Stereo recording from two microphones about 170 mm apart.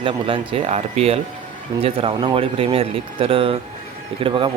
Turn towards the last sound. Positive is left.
turn(degrees=-30)  # may be behind; listen again after turning